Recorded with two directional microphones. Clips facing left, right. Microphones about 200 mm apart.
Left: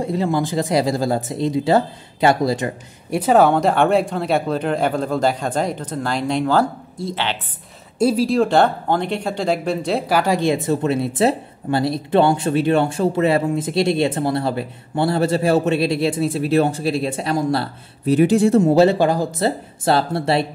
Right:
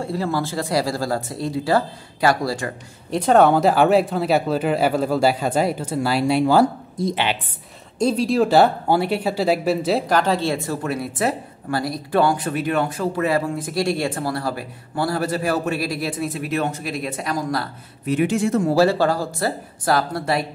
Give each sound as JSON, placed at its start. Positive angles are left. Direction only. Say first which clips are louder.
{"t": 0.0, "sound": "speech", "louder": "left 3 dB", "side_deg": 20}
{"t": 3.2, "sound": "speech", "louder": "even", "side_deg": 5}
{"t": 8.0, "sound": "speech", "louder": "left 2 dB", "side_deg": 5}